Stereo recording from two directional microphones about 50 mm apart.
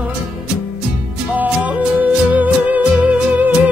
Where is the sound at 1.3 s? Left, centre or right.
Right.